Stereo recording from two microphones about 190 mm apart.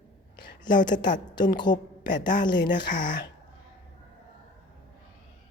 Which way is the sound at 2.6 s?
65° left (ahead or behind).